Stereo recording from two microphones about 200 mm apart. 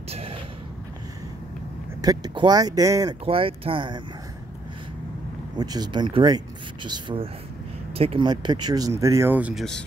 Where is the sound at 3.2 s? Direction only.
30° right (ahead or behind).